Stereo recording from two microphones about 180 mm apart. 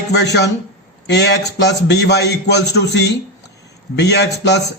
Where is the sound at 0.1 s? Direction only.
70° left (ahead or behind).